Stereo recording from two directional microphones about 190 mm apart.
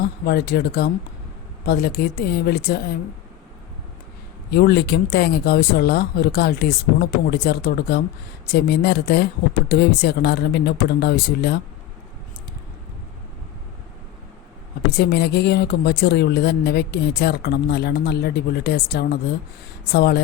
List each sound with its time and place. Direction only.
0.0 s speech: 55° left (ahead or behind)
4.5 s speech: 60° left (ahead or behind)
14.9 s speech: 60° left (ahead or behind)